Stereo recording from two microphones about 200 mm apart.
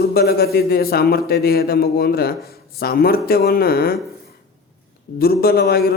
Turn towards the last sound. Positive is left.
turn(degrees=50)  # may be behind; listen again after turning